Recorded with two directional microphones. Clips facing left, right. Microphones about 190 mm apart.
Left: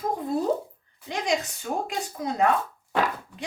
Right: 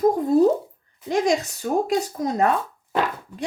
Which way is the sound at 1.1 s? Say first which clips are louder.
Right 6 dB; 40° right (ahead or behind).